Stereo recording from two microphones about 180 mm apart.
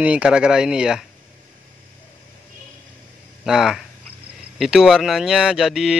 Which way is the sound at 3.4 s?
Centre (ahead or behind).